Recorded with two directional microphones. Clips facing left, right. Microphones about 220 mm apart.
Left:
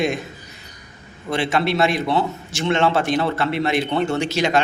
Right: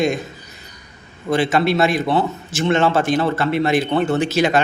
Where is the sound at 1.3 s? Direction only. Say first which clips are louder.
Right 3 dB; centre (ahead or behind).